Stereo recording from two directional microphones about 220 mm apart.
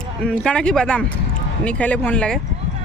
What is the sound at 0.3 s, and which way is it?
Speech, 5° left (ahead or behind).